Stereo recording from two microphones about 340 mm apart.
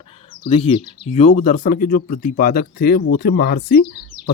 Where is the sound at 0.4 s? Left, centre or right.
Centre.